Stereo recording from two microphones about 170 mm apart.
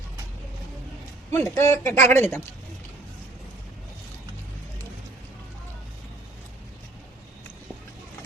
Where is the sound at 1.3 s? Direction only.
15° left (ahead or behind).